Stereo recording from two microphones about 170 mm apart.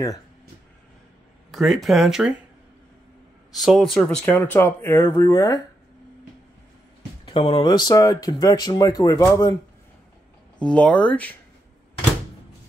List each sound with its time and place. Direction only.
1.5 s speech: centre (ahead or behind)
3.5 s speech: centre (ahead or behind); by 5.6 s 20° left (ahead or behind)
7.2 s speech: 30° left (ahead or behind)
10.6 s speech: 5° left (ahead or behind)